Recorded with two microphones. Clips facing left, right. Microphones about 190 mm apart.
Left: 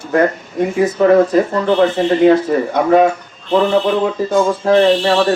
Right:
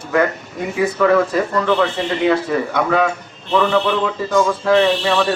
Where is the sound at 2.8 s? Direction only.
40° left (ahead or behind).